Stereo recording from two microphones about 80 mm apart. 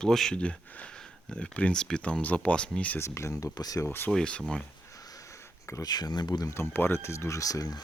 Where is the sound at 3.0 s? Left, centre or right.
Left.